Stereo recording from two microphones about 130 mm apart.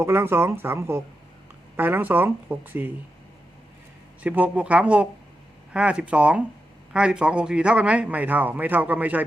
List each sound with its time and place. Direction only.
0.0 s a man's voice: 20° right (ahead or behind)
4.2 s a man's voice: 10° right (ahead or behind)